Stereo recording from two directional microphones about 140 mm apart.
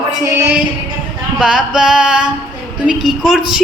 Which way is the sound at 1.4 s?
5° right (ahead or behind).